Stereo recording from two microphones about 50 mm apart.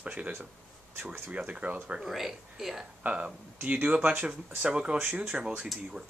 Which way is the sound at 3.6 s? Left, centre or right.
Right.